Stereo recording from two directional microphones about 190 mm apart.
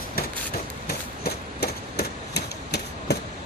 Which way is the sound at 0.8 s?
55° left (ahead or behind).